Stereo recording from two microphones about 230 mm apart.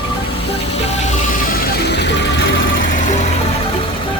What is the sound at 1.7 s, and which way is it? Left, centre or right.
Music, left.